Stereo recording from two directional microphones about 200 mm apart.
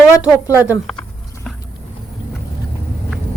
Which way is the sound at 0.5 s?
10° right (ahead or behind).